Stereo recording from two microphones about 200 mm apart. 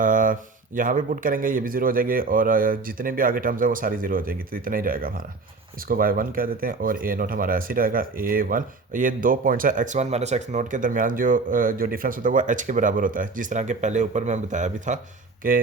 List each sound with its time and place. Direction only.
0.0 s mantra: 40° right (ahead or behind)
0.8 s speech: 40° right (ahead or behind)